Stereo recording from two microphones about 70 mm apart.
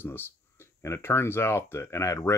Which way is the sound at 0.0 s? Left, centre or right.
Left.